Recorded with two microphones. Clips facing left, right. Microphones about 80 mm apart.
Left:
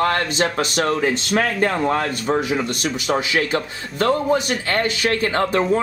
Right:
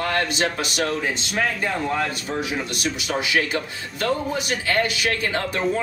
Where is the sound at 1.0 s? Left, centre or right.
Left.